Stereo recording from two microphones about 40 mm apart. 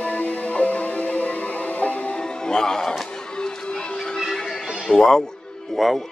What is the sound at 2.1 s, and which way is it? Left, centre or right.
Music, centre.